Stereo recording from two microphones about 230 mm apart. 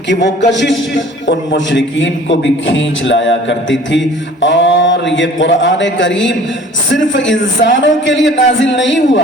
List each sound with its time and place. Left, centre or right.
0.5 s a man's voice: left